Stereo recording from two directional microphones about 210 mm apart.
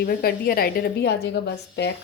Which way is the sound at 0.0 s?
45° left (ahead or behind).